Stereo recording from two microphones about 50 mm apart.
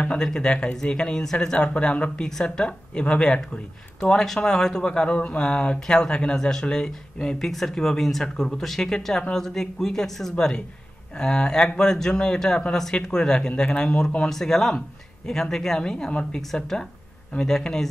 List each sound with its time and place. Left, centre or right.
0.2 s speech: centre
4.0 s speech: centre
10.3 s speech: centre
16.1 s speech: left
16.3 s speech: centre